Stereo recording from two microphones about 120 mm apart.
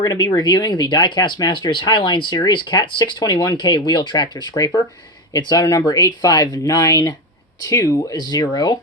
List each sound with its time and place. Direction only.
0.0 s speech: 35° left (ahead or behind)